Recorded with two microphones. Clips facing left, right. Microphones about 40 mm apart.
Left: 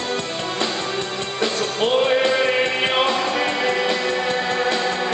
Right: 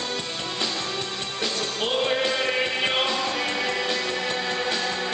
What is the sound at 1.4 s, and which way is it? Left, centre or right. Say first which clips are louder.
Music: left 7 dB; centre.